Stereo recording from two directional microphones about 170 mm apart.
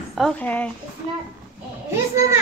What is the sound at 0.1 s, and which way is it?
Speech, 5° left (ahead or behind).